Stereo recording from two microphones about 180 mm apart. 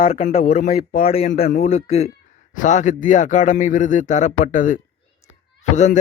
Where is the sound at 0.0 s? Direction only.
50° left (ahead or behind).